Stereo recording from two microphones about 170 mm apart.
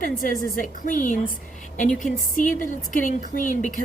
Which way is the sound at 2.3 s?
50° left (ahead or behind).